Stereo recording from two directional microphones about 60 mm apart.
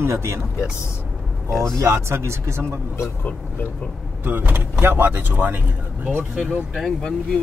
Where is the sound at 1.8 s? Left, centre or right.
Right.